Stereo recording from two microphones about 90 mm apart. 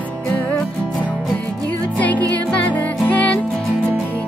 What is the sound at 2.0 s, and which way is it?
Music, 15° left (ahead or behind).